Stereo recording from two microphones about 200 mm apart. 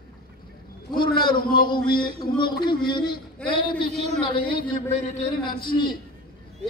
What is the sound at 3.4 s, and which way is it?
Speech, 5° left (ahead or behind).